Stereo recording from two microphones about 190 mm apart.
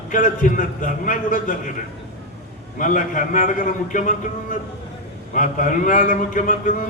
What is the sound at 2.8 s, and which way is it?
A man's voice, 45° left (ahead or behind).